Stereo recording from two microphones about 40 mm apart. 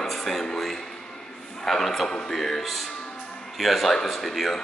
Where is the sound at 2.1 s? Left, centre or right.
Centre.